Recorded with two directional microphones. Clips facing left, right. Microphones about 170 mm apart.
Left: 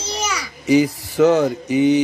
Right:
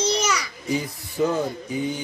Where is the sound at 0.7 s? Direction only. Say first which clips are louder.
Left 12 dB; 85° left.